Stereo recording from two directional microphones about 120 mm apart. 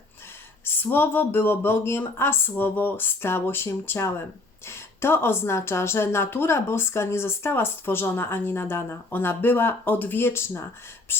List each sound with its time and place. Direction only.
0.6 s a woman's voice: 15° left (ahead or behind)
11.1 s whispering: 20° left (ahead or behind)